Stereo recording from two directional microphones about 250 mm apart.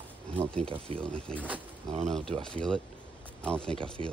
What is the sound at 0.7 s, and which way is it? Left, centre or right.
Speech, right.